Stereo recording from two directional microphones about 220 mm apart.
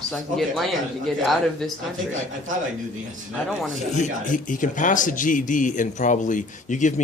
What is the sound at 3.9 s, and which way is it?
A man's voice, 35° left (ahead or behind).